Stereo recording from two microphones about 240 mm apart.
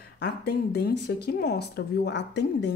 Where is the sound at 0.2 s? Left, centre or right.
Left.